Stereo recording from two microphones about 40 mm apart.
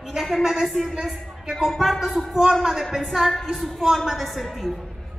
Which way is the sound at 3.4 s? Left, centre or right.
Centre.